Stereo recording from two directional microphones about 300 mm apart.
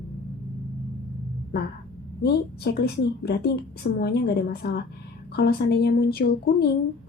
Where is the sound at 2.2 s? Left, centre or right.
Left.